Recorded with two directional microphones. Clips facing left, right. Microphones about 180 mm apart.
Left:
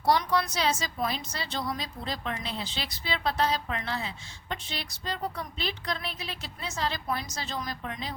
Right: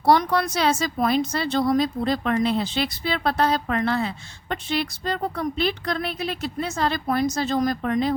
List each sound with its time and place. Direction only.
0.0 s a woman's voice: 60° right (ahead or behind)